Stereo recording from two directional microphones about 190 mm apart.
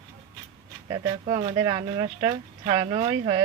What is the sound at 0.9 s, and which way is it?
Speech, 25° right (ahead or behind).